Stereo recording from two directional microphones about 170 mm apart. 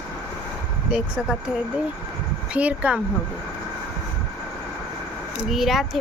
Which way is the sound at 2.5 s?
5° right (ahead or behind).